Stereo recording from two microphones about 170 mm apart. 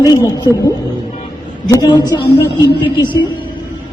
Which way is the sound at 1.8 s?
25° left (ahead or behind).